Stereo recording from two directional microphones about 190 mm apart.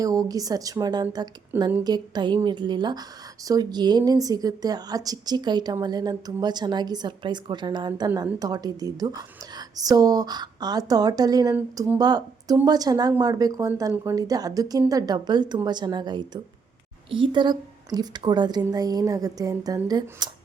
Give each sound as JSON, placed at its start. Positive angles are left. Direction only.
{"t": 0.0, "sound": "a woman's voice", "side_deg": -20}